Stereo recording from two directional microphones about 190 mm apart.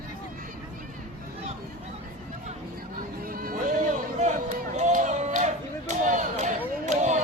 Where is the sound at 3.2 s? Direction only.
50° right (ahead or behind).